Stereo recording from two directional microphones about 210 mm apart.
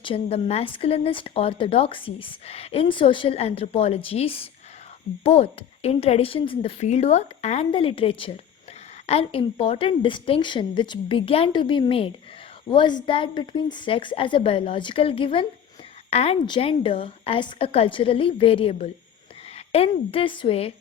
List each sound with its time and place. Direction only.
0.0 s a woman's voice: 25° left (ahead or behind)